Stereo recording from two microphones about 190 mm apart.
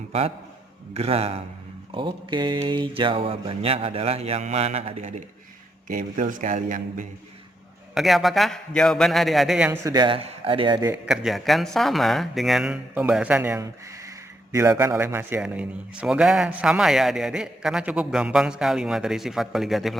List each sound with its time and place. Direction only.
0.1 s a man's voice: 30° right (ahead or behind)
1.9 s mantra: 25° right (ahead or behind)
5.9 s a man's voice: 45° right (ahead or behind)
7.9 s a man's voice: centre (ahead or behind)
9.8 s mantra: 20° right (ahead or behind)
11.0 s a man's voice: 5° right (ahead or behind)